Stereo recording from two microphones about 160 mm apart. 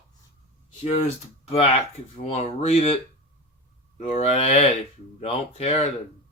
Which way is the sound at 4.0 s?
40° left (ahead or behind).